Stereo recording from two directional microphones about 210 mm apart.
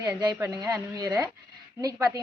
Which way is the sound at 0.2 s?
15° right (ahead or behind).